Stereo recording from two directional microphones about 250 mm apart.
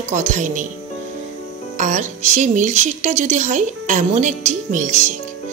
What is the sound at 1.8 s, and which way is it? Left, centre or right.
Speech, right.